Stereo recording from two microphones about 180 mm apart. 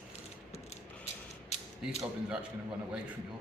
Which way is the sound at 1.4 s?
35° left (ahead or behind).